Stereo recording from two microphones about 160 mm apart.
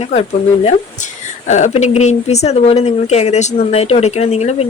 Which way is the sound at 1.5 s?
45° left (ahead or behind).